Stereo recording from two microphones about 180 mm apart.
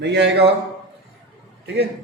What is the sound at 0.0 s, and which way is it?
Speech, 70° right (ahead or behind).